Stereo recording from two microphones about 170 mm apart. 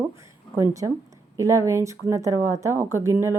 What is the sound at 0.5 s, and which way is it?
A woman's voice, 20° right (ahead or behind).